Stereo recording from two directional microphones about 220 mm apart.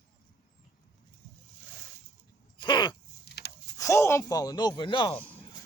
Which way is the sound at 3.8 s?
15° left (ahead or behind).